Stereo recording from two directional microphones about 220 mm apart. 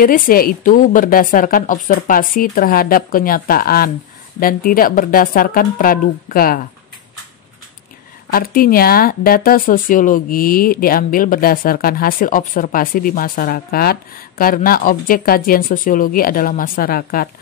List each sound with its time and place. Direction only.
0.0 s speech: 40° left (ahead or behind)
8.3 s speech: 40° left (ahead or behind)